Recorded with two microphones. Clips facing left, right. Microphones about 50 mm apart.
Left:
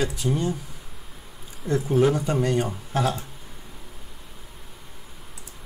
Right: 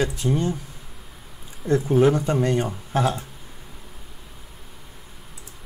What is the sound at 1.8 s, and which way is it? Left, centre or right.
Speech, centre.